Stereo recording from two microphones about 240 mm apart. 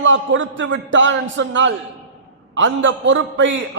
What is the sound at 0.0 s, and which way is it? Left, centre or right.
A man's voice, right.